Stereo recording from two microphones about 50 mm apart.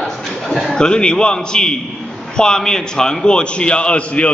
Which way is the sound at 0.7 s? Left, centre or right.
Centre.